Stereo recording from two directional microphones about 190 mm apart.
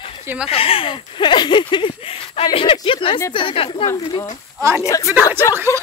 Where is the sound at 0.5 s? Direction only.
30° left (ahead or behind).